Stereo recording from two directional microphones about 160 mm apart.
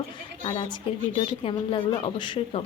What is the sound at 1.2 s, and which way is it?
A woman's voice, 35° left (ahead or behind).